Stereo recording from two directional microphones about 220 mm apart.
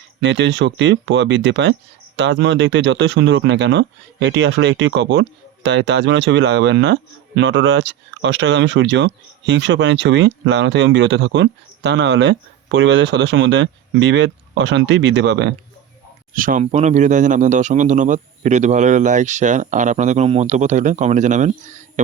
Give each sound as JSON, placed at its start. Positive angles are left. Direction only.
{"t": 0.2, "sound": "speech", "side_deg": -55}
{"t": 16.3, "sound": "a man's voice", "side_deg": -40}